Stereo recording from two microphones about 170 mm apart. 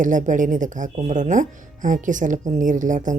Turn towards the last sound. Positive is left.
turn(degrees=-50)  # may be behind; listen again after turning